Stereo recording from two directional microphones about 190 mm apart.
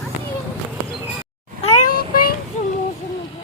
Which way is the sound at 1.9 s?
50° left (ahead or behind).